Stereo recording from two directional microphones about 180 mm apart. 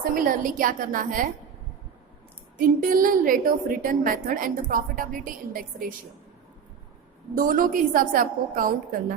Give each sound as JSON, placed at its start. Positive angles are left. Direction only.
{"t": 0.0, "sound": "a woman's voice", "side_deg": -50}
{"t": 2.6, "sound": "a woman's voice", "side_deg": -50}
{"t": 7.3, "sound": "a woman's voice", "side_deg": -50}